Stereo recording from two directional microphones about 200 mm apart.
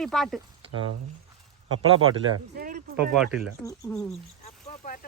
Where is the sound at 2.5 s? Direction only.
45° right (ahead or behind).